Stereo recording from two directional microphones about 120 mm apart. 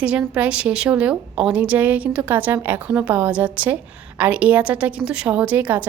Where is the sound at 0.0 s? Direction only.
10° right (ahead or behind).